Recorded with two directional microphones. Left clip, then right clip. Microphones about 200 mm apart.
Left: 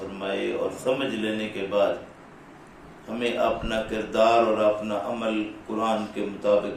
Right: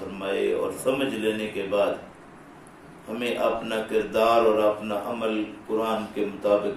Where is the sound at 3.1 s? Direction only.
Centre (ahead or behind).